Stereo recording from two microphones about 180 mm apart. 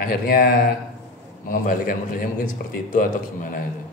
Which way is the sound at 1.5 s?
50° left (ahead or behind).